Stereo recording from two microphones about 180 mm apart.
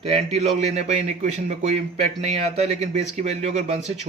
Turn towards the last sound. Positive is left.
turn(degrees=-40)  # may be behind; listen again after turning